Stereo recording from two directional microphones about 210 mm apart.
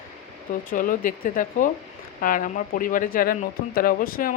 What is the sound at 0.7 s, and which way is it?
Speech, 40° left (ahead or behind).